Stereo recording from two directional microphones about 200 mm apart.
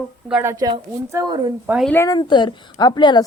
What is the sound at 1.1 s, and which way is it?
Speech, 20° right (ahead or behind).